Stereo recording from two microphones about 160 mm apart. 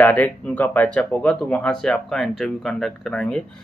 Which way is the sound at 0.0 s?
10° left (ahead or behind).